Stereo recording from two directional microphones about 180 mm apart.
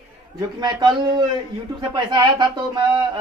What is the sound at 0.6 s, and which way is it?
Speech, 25° right (ahead or behind).